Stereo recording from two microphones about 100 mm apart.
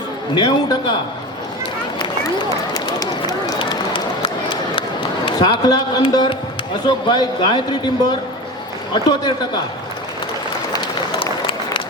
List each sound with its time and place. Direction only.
0.3 s a man's voice: 50° left (ahead or behind)
2.4 s run: 40° left (ahead or behind)
3.6 s run: 60° left (ahead or behind)
5.2 s a man's voice: 50° left (ahead or behind)
11.2 s applause: 55° left (ahead or behind)